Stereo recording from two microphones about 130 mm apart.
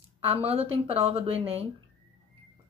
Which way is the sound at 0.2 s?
50° right (ahead or behind).